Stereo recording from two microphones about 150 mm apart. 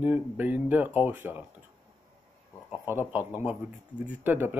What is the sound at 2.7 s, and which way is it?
Speech, 15° right (ahead or behind).